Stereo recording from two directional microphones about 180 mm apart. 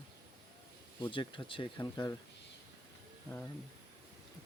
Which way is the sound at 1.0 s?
25° left (ahead or behind).